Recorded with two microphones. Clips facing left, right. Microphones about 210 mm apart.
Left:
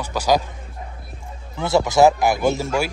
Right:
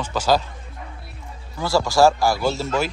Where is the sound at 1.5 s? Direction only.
20° left (ahead or behind).